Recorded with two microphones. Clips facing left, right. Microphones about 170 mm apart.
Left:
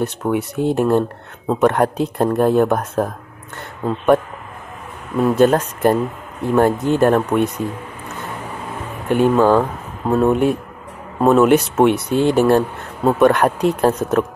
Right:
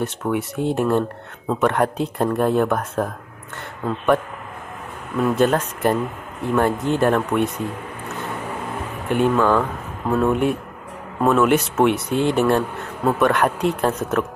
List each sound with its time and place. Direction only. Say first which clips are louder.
0.0 s speech: left 3 dB; 40° left (ahead or behind)
1.5 s speech: left 4 dB; 40° left (ahead or behind)
9.1 s speech: left 4 dB; 35° left (ahead or behind)